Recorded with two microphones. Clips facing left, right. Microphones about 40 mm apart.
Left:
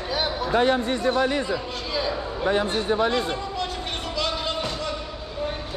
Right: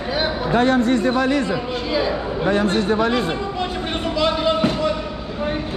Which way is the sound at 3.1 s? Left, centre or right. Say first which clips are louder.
Right 4 dB; centre.